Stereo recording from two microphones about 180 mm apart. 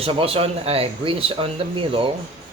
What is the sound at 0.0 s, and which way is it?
Speech, 30° right (ahead or behind).